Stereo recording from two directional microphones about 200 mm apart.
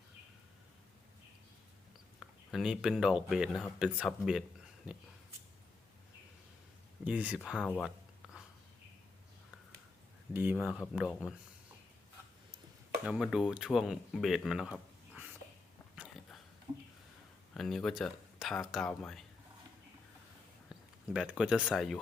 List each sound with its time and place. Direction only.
2.1 s speech: centre (ahead or behind)
7.0 s speech: 5° right (ahead or behind)
7.7 s a sound: centre (ahead or behind)
10.3 s speech: 10° right (ahead or behind)
13.1 s speech: centre (ahead or behind)
16.7 s a sound: 20° right (ahead or behind)
17.5 s speech: centre (ahead or behind)
20.7 s speech: 5° right (ahead or behind)